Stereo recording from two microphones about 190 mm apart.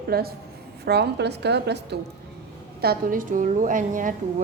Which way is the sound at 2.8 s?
50° right (ahead or behind).